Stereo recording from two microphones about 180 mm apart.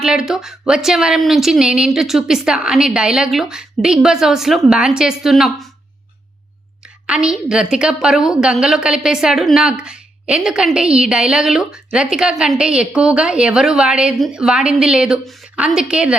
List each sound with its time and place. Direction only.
0.0 s a woman's voice: 5° right (ahead or behind)
7.1 s a woman's voice: 5° right (ahead or behind)